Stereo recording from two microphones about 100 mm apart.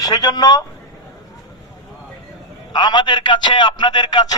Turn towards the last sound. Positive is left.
turn(degrees=45)  # may be behind; listen again after turning